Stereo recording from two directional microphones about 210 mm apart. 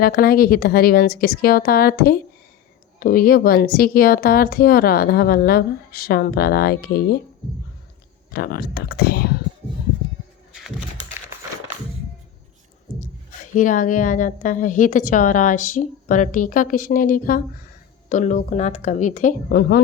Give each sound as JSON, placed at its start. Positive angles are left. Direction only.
{"t": 0.0, "sound": "speech", "side_deg": 45}
{"t": 8.3, "sound": "speech", "side_deg": 50}
{"t": 13.5, "sound": "a woman's voice", "side_deg": 40}